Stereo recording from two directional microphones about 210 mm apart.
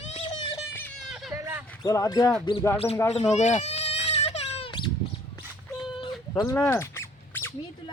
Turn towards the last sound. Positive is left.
turn(degrees=10)  # may be behind; listen again after turning